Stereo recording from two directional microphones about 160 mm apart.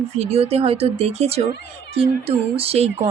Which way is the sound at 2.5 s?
40° right (ahead or behind).